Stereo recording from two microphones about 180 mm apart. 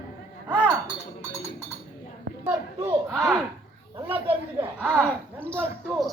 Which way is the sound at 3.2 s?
10° right (ahead or behind).